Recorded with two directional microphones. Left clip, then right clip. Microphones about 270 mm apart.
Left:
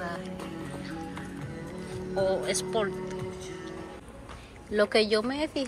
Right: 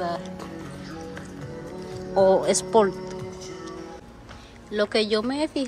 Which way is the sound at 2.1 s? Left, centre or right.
Right.